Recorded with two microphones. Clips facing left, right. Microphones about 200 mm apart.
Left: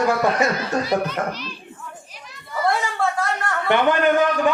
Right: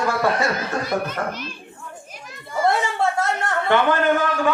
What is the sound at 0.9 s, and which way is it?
Speech, 50° right (ahead or behind).